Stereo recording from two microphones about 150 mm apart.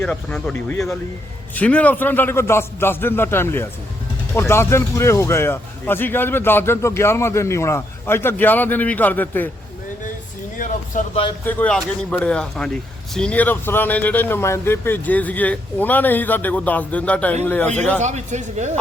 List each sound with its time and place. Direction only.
0.0 s a man's voice: 5° left (ahead or behind)
10.6 s a sound: 60° left (ahead or behind)
11.4 s a man's voice: 10° left (ahead or behind)
18.0 s speech: 50° right (ahead or behind)